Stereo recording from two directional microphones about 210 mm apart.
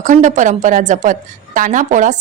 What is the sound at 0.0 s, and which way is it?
A woman's voice, 35° right (ahead or behind).